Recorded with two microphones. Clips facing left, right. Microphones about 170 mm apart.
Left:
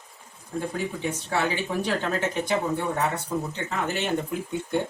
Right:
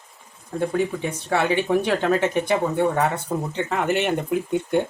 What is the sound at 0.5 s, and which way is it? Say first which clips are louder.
Speech: right 6 dB; 60° right (ahead or behind).